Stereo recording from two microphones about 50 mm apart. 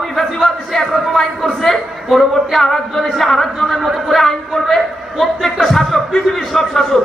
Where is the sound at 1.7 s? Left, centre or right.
Centre.